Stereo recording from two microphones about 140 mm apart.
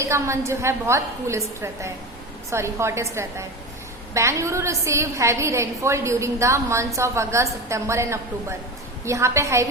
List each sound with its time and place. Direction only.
0.0 s a woman's voice: 20° right (ahead or behind)